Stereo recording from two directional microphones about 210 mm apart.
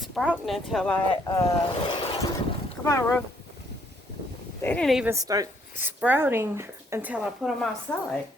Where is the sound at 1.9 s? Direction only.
20° left (ahead or behind).